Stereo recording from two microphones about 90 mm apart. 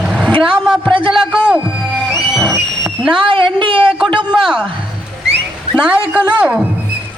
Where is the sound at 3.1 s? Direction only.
65° right (ahead or behind).